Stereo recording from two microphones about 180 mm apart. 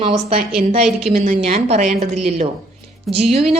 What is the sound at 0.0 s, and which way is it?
A woman's voice, 35° right (ahead or behind).